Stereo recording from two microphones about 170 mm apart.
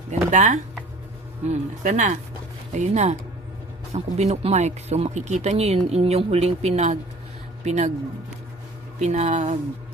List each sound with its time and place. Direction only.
0.1 s speech: 45° right (ahead or behind)
9.0 s speech: 40° right (ahead or behind)